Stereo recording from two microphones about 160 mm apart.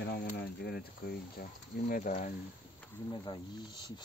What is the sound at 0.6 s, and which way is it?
Speech, 80° left.